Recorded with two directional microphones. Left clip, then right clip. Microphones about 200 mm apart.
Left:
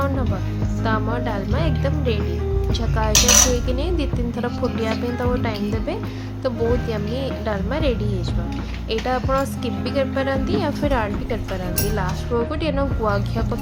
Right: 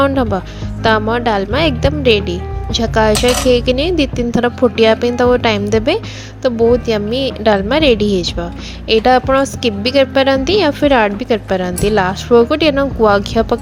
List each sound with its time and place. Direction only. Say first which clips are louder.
0.8 s a woman's voice: right 11 dB; 35° right (ahead or behind)